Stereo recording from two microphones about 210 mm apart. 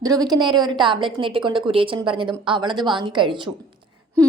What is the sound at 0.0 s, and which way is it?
A woman's voice, 15° right (ahead or behind).